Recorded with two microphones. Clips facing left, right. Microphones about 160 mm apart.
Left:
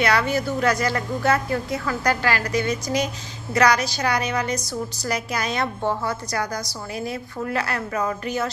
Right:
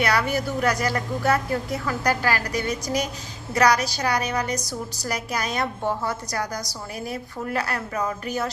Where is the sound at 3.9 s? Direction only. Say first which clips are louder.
Left 1 dB; 10° right (ahead or behind).